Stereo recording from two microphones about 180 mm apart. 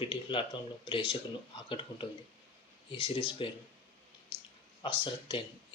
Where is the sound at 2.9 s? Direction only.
30° left (ahead or behind).